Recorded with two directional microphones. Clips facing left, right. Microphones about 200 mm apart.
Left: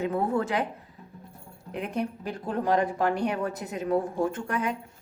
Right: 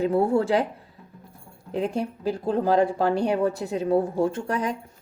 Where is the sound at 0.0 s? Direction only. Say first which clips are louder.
Right 5 dB; 30° right (ahead or behind).